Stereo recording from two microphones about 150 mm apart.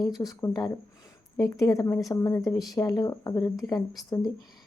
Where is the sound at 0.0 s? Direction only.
25° left (ahead or behind).